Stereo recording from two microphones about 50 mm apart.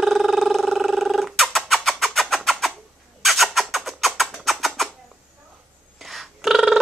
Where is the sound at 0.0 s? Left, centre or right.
Centre.